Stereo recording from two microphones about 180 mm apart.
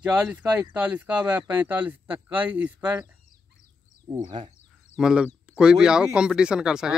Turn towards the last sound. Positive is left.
turn(degrees=-5)  # may be behind; listen again after turning